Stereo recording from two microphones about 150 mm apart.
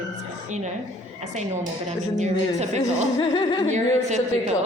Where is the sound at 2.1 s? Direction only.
50° right (ahead or behind).